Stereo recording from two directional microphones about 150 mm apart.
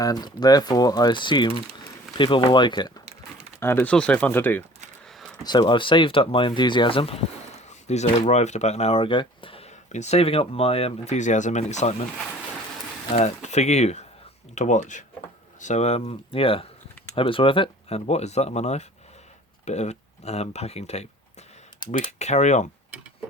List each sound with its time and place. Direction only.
0.0 s speech: 25° left (ahead or behind)
3.6 s speech: 15° left (ahead or behind)
5.4 s speech: 30° left (ahead or behind)
7.7 s a sound: 50° left (ahead or behind)
8.3 s speech: 50° left (ahead or behind)
13.1 s speech: 50° left (ahead or behind)